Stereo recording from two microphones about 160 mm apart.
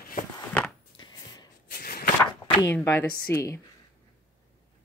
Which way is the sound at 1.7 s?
65° left (ahead or behind).